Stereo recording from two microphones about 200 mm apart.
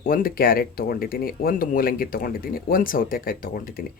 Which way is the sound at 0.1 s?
45° left (ahead or behind).